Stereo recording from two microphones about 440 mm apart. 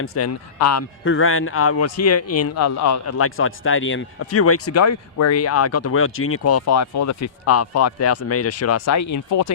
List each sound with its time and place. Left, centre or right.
0.0 s a man's voice: left